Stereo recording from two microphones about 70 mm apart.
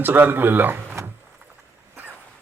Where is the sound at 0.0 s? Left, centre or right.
Right.